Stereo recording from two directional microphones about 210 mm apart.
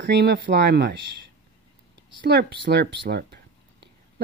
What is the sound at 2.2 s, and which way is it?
Speech, 55° right (ahead or behind).